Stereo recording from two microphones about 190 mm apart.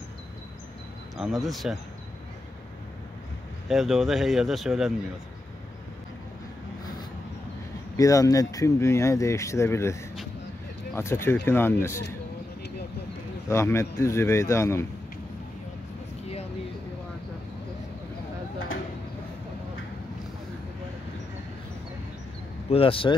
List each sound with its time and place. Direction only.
1.1 s speech: centre (ahead or behind)
3.6 s speech: centre (ahead or behind)
7.9 s speech: 15° left (ahead or behind)
11.0 s speech: 15° left (ahead or behind)
13.5 s speech: 15° left (ahead or behind)
22.7 s speech: 30° left (ahead or behind)